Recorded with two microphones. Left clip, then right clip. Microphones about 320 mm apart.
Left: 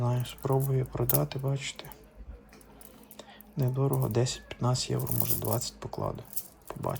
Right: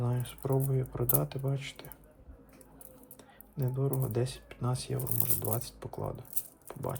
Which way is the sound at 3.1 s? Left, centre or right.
Centre.